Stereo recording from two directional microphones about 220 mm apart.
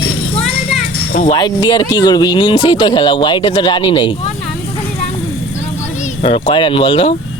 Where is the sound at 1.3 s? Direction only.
20° left (ahead or behind).